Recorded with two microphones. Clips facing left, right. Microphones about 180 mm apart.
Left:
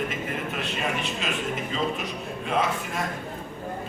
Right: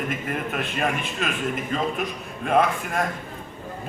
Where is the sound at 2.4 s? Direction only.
55° right (ahead or behind).